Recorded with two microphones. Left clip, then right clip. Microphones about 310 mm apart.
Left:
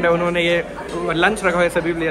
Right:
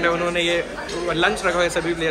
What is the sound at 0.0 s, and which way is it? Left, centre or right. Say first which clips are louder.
A man's voice: left 3 dB; left.